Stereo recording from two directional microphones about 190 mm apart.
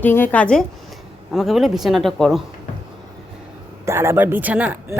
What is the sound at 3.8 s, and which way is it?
Speech, 15° right (ahead or behind).